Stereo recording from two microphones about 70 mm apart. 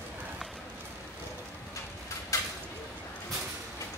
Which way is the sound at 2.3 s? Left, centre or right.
Left.